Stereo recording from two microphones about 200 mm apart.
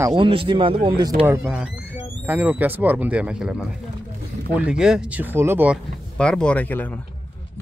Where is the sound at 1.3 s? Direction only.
5° right (ahead or behind).